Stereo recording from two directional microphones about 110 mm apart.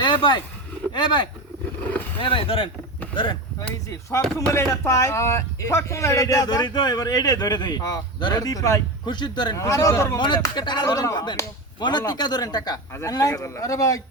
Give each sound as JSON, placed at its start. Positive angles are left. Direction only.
{"t": 0.0, "sound": "a sound", "side_deg": 45}
{"t": 0.9, "sound": "a man's voice", "side_deg": 45}
{"t": 4.4, "sound": "speech", "side_deg": 25}
{"t": 9.0, "sound": "a man's voice", "side_deg": 45}
{"t": 9.6, "sound": "a man's voice", "side_deg": 30}
{"t": 10.2, "sound": "a man's voice", "side_deg": 45}